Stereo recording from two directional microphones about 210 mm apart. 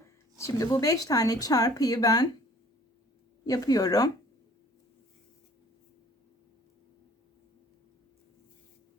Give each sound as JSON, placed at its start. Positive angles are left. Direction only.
{"t": 0.3, "sound": "speech", "side_deg": 15}
{"t": 3.4, "sound": "speech", "side_deg": 15}